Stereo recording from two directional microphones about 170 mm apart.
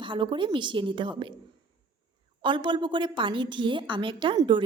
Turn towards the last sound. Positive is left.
turn(degrees=-30)  # may be behind; listen again after turning